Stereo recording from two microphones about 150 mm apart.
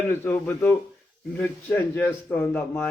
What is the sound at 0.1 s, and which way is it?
A man's voice, 10° left (ahead or behind).